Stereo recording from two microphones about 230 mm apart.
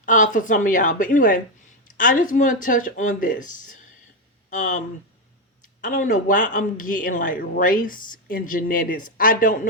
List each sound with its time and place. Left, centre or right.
0.0 s speech: left